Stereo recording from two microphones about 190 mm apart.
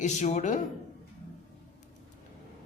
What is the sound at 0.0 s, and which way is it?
Speech, 40° left (ahead or behind).